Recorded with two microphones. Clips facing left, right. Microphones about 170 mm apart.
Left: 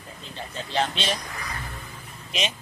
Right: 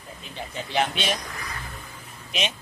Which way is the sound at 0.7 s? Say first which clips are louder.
Right 1 dB; 5° right (ahead or behind).